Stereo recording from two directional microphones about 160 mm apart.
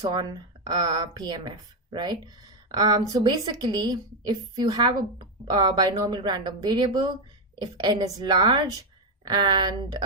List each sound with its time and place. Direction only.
0.7 s a woman's voice: 25° right (ahead or behind)